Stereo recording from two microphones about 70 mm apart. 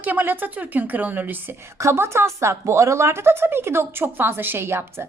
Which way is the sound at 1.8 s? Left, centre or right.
Right.